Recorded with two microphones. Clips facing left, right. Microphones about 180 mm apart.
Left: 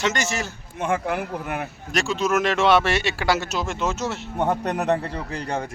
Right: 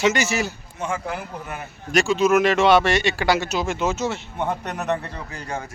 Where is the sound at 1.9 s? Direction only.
Centre (ahead or behind).